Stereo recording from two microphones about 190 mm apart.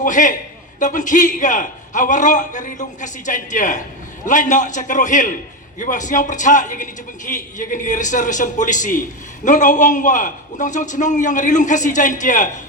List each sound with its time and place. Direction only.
0.0 s a man's voice: 45° left (ahead or behind)